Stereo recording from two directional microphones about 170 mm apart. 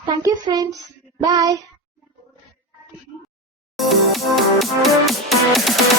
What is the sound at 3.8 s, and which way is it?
Music, centre (ahead or behind).